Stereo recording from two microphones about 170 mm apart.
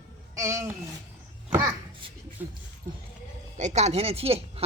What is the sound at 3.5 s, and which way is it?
Speech, 45° right (ahead or behind).